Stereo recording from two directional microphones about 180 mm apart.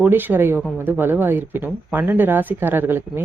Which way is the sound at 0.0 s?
10° right (ahead or behind).